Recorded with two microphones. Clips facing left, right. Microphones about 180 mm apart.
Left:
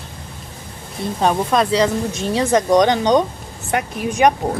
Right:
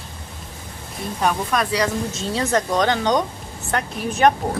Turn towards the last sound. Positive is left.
turn(degrees=15)  # may be behind; listen again after turning